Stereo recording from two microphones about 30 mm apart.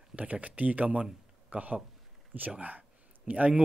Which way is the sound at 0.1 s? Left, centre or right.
Right.